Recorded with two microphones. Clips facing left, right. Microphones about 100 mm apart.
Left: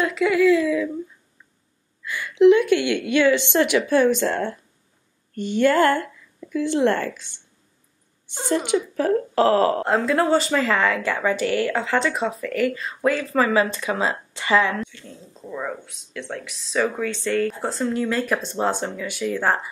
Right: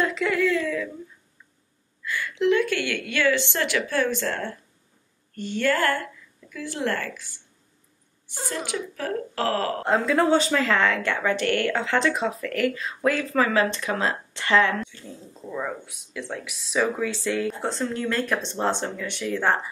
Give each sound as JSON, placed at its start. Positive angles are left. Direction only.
{"t": 0.0, "sound": "a sound", "side_deg": 5}
{"t": 2.0, "sound": "a woman's voice", "side_deg": 20}
{"t": 9.8, "sound": "speech", "side_deg": 0}